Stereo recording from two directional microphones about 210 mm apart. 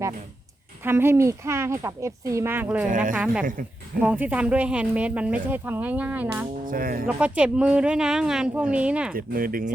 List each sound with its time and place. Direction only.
0.9 s speech: 10° right (ahead or behind)
2.9 s a woman's voice: 40° right (ahead or behind)
4.0 s speech: 5° right (ahead or behind)
6.7 s speech: 40° right (ahead or behind)
7.2 s a woman's voice: 5° right (ahead or behind)
9.1 s speech: 45° right (ahead or behind)